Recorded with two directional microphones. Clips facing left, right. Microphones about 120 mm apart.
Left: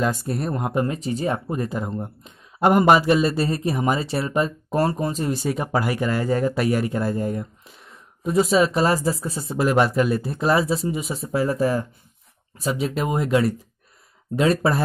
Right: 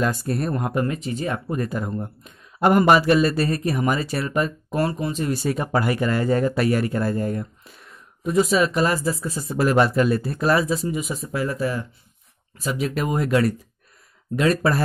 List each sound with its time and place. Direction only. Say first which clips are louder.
0.0 s speech: even; 15° left (ahead or behind)
0.9 s speech: left 2 dB; 35° left (ahead or behind)
1.5 s speech: even; 20° left (ahead or behind)
4.6 s speech: left 2 dB; 40° left (ahead or behind)
5.3 s speech: right 1 dB; 15° left (ahead or behind)
8.2 s speech: left 1 dB; 30° left (ahead or behind)
9.6 s speech: right 1 dB; 15° left (ahead or behind)